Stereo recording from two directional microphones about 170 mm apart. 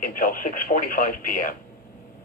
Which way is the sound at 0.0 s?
55° left (ahead or behind).